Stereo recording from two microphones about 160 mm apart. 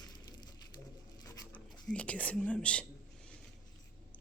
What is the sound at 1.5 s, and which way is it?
Speech, 10° left (ahead or behind).